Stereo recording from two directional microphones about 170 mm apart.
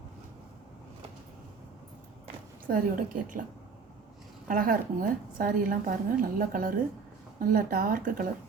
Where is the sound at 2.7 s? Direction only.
55° right (ahead or behind).